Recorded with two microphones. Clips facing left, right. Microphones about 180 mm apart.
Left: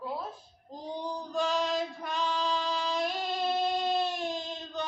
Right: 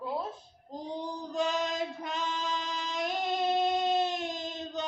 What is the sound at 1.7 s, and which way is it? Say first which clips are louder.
Female singing: left 2 dB; 20° right (ahead or behind).